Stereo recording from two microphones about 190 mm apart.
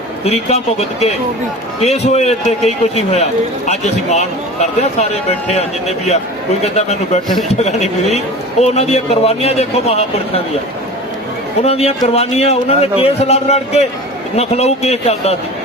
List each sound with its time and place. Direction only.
0.3 s speech: 35° left (ahead or behind)
6.6 s speech: 35° left (ahead or behind)
11.6 s speech: 30° left (ahead or behind)